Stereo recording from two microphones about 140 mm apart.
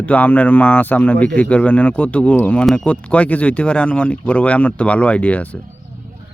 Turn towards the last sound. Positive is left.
turn(degrees=10)  # may be behind; listen again after turning